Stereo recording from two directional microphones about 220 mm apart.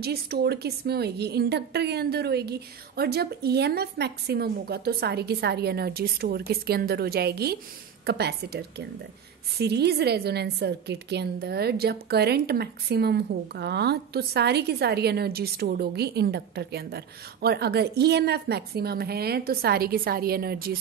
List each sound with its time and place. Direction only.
0.0 s a woman's voice: 45° right (ahead or behind)